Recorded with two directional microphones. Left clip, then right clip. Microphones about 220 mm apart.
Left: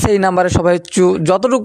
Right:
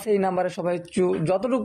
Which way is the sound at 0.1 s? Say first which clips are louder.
Left 8 dB; 50° left (ahead or behind).